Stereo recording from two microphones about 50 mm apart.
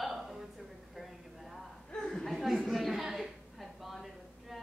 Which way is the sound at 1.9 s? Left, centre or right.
Centre.